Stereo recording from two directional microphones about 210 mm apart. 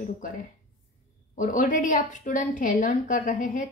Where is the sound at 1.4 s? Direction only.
40° left (ahead or behind).